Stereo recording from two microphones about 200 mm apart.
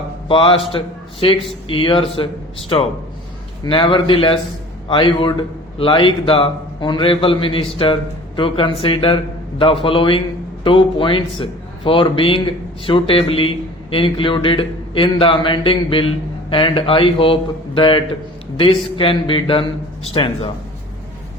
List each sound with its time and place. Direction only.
0.3 s a man's voice: 25° left (ahead or behind)